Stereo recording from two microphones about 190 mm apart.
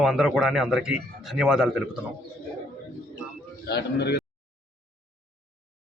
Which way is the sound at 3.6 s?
60° left (ahead or behind).